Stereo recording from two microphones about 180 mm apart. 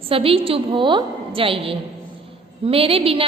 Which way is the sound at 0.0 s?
30° right (ahead or behind).